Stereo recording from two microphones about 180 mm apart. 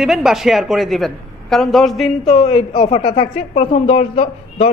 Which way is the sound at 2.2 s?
35° left (ahead or behind).